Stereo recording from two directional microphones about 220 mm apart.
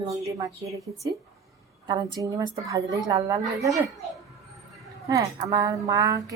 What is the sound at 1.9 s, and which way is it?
A woman's voice, 20° right (ahead or behind).